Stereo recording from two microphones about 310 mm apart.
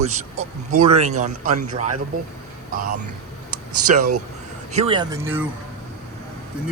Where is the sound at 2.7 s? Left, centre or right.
Right.